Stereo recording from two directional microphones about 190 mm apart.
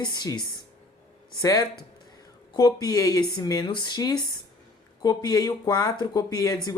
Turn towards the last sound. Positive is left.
turn(degrees=20)  # may be behind; listen again after turning